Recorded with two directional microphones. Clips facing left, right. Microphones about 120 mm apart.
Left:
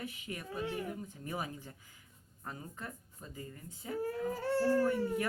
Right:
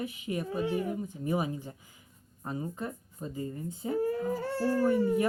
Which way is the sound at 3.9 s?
5° right (ahead or behind).